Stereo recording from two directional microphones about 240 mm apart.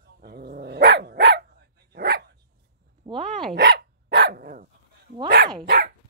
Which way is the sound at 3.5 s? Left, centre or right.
Right.